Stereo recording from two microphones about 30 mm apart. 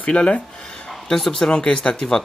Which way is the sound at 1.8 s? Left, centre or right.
Left.